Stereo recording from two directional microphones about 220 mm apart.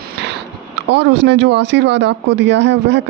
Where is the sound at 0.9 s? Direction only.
50° right (ahead or behind).